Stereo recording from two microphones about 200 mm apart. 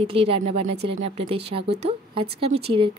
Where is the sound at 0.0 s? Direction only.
30° right (ahead or behind).